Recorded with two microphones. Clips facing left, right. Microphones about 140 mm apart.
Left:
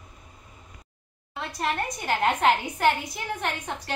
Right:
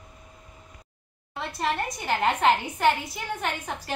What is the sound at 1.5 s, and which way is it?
A woman's voice, centre (ahead or behind).